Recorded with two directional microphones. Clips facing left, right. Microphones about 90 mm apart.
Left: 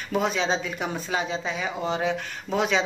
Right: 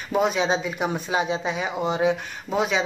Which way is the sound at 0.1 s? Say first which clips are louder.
Right 3 dB; 10° right (ahead or behind).